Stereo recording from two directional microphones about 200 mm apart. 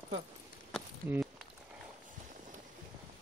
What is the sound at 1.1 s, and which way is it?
Walk, centre (ahead or behind).